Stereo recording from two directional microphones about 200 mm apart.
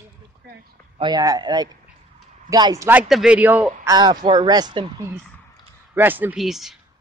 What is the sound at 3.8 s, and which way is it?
Speech, 20° right (ahead or behind).